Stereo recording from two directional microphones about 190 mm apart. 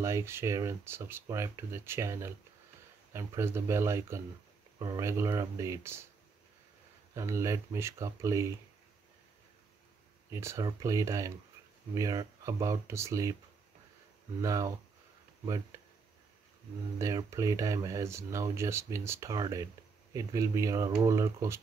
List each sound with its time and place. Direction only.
0.0 s speech: 15° right (ahead or behind)
7.2 s speech: 15° right (ahead or behind)
10.3 s speech: 15° right (ahead or behind)
14.4 s speech: 15° right (ahead or behind)
17.0 s speech: 20° right (ahead or behind)